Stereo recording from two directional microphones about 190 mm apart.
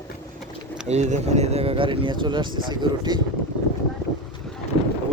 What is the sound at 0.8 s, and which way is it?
Speech, 35° right (ahead or behind).